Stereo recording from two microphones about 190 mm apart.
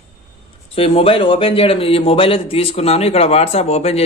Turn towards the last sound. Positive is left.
turn(degrees=35)  # may be behind; listen again after turning